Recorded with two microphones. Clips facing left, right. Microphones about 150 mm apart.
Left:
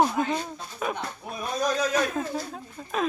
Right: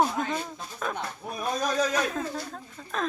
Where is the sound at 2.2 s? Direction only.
15° left (ahead or behind).